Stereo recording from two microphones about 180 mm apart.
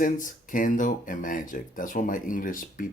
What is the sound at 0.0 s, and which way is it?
Speech, 45° left (ahead or behind).